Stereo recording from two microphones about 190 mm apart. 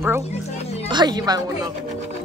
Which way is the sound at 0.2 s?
35° left (ahead or behind).